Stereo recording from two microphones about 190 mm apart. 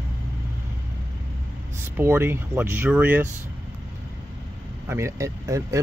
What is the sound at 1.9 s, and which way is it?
Speech, 10° right (ahead or behind).